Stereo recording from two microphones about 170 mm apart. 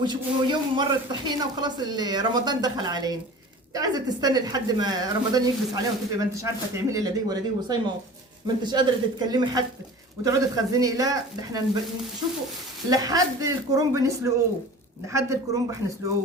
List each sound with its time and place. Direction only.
0.0 s a woman's voice: 25° right (ahead or behind)
12.9 s a woman's voice: 20° right (ahead or behind)